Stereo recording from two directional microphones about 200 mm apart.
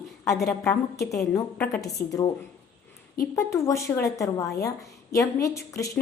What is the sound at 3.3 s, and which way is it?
A woman's voice, 15° left (ahead or behind).